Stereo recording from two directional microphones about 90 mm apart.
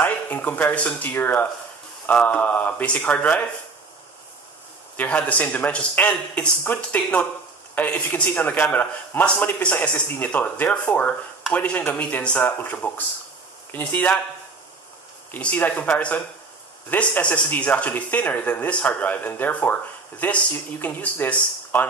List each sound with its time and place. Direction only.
0.0 s speech: 20° left (ahead or behind)
4.9 s speech: 15° left (ahead or behind)
15.3 s speech: 15° left (ahead or behind)